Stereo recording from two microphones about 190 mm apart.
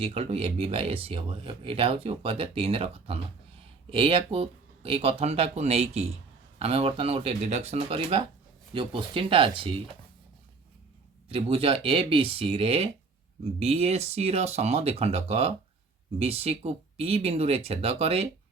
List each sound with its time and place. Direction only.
0.0 s speech: 30° right (ahead or behind)
11.3 s speech: 30° right (ahead or behind)